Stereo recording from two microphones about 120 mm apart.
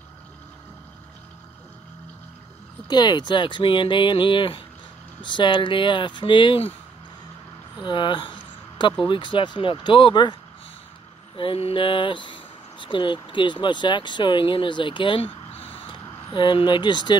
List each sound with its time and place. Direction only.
2.9 s speech: 35° left (ahead or behind)
7.8 s speech: 40° left (ahead or behind)
11.3 s speech: 50° left (ahead or behind)